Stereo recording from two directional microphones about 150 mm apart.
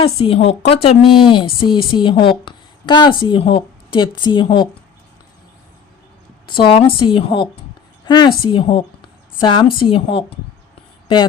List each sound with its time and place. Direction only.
0.0 s a woman's voice: 40° left (ahead or behind)
6.5 s a woman's voice: 35° left (ahead or behind)